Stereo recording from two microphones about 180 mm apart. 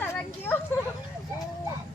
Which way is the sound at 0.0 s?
10° left (ahead or behind).